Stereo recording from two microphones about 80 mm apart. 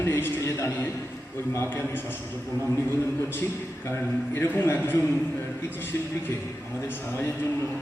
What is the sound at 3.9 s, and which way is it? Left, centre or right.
A man's voice, left.